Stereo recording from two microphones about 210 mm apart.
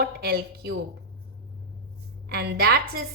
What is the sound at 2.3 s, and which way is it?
Speech, 50° right (ahead or behind).